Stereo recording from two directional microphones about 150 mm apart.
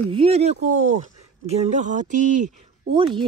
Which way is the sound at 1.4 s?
50° right (ahead or behind).